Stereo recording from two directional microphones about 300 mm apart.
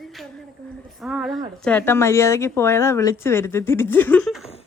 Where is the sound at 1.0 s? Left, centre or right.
Centre.